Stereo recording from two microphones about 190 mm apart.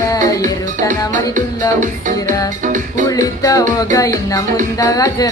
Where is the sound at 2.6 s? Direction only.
40° right (ahead or behind).